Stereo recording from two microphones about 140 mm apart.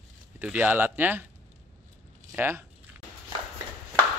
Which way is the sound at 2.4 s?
15° right (ahead or behind).